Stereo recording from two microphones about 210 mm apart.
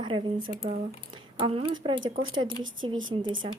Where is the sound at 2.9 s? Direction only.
70° right (ahead or behind).